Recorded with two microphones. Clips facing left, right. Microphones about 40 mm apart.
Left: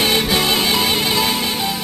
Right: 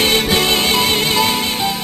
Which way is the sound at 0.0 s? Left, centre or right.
Centre.